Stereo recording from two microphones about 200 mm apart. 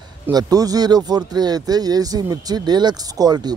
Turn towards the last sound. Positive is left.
turn(degrees=-20)  # may be behind; listen again after turning